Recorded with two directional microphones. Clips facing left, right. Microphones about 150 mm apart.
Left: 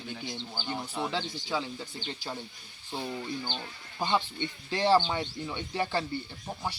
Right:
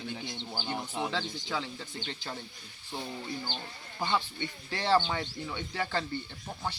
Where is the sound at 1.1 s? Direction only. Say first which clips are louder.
Left 2 dB; 15° left (ahead or behind).